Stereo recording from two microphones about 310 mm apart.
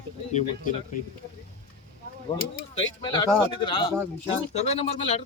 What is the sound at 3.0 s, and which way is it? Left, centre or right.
Speech, centre.